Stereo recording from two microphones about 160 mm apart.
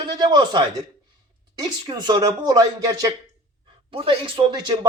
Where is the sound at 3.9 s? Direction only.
35° right (ahead or behind).